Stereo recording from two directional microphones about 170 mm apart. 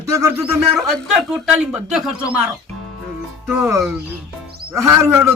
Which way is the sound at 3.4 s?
15° right (ahead or behind).